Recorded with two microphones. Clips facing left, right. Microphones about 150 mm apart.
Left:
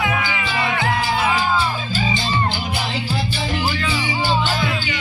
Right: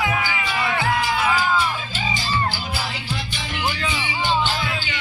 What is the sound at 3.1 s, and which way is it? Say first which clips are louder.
Music: left 6 dB; 35° left (ahead or behind).